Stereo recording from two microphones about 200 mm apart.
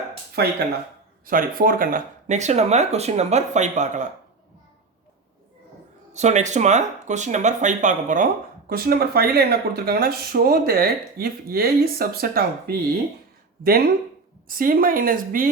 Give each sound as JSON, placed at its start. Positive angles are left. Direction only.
{"t": 0.4, "sound": "speech", "side_deg": -50}
{"t": 6.1, "sound": "speech", "side_deg": -35}
{"t": 8.7, "sound": "speech", "side_deg": -50}